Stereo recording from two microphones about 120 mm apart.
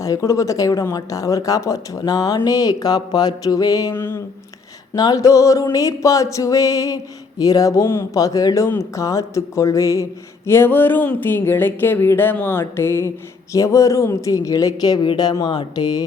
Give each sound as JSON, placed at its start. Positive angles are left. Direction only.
{"t": 0.0, "sound": "music", "side_deg": 25}
{"t": 3.9, "sound": "music", "side_deg": 20}
{"t": 4.9, "sound": "music", "side_deg": 30}
{"t": 13.5, "sound": "speech", "side_deg": 25}